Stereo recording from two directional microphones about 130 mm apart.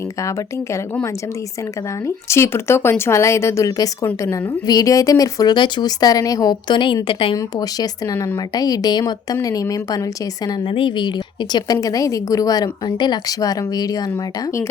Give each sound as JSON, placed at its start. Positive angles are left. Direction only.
{"t": 2.0, "sound": "a woman's voice", "side_deg": 20}
{"t": 7.3, "sound": "a woman's voice", "side_deg": 30}
{"t": 10.7, "sound": "a woman's voice", "side_deg": 40}